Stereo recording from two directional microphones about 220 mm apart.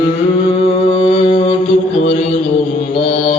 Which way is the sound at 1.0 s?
30° left (ahead or behind).